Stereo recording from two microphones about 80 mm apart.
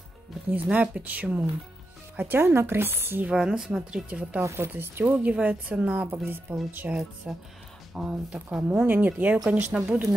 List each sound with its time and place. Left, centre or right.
0.5 s speech: centre
3.3 s a woman's voice: centre
4.4 s speech: right; by 6.0 s centre
6.0 s speech: right
7.3 s a woman's voice: centre